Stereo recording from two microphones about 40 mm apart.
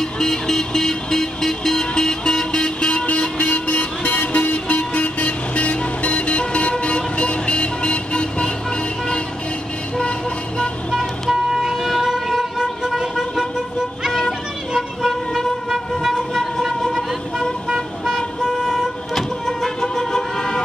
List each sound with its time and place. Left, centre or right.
0.0 s music: centre
11.0 s vehicle: centre
14.7 s vehicle: centre
19.8 s vehicle: centre